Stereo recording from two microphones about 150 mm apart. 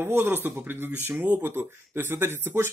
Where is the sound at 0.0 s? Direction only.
15° right (ahead or behind).